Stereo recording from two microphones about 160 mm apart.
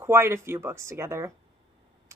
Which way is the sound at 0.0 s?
15° right (ahead or behind).